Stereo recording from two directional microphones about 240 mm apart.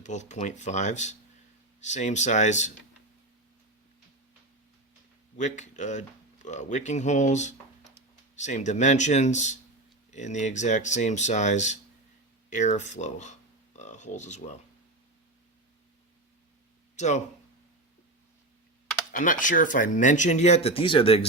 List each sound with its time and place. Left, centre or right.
0.0 s speech: left
5.4 s speech: left
13.7 s a sound: left
17.0 s speech: left
19.1 s speech: left